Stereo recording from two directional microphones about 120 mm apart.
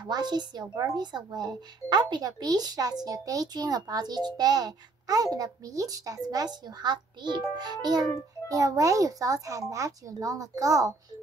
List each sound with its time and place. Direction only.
0.0 s a child's voice: 35° right (ahead or behind)